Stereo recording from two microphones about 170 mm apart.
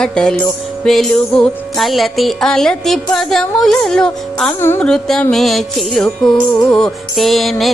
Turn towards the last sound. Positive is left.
turn(degrees=0)  # may be behind; listen again after turning